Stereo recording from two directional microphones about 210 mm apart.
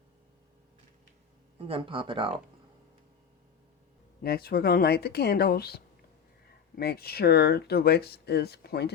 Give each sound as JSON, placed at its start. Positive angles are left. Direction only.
{"t": 1.5, "sound": "speech", "side_deg": -25}
{"t": 4.2, "sound": "speech", "side_deg": 45}